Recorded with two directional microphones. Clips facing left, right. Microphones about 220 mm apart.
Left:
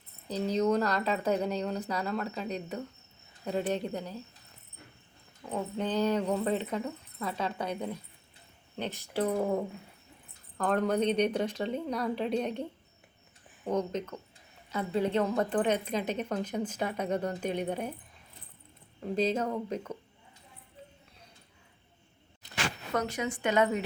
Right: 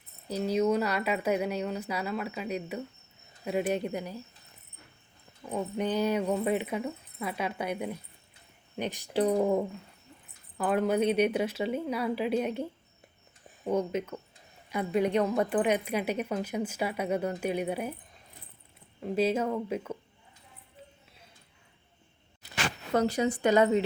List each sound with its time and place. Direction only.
0.3 s a woman's voice: 10° right (ahead or behind)
5.5 s a woman's voice: 10° right (ahead or behind)
10.6 s a woman's voice: 5° right (ahead or behind)
13.7 s a woman's voice: 10° right (ahead or behind)
19.1 s a woman's voice: 10° right (ahead or behind)
22.4 s a sound: 5° right (ahead or behind)
23.0 s a woman's voice: 35° right (ahead or behind)